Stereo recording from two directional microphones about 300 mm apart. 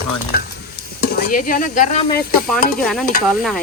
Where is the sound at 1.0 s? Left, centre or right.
Left.